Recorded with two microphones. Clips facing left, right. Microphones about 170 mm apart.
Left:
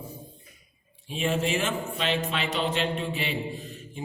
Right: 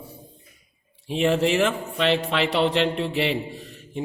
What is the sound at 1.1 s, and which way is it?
A man's voice, 75° right (ahead or behind).